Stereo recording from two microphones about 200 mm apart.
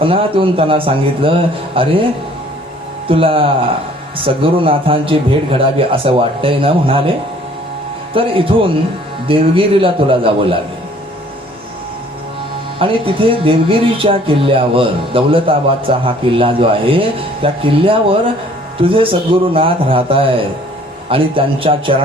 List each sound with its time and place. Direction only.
0.0 s speech: 25° right (ahead or behind)
3.1 s speech: 25° right (ahead or behind)
8.1 s speech: 25° right (ahead or behind)
12.8 s speech: 25° right (ahead or behind)